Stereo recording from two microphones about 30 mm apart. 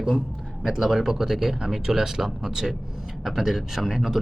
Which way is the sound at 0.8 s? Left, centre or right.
Centre.